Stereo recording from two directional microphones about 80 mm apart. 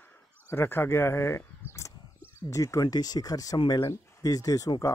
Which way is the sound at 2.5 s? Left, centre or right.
Left.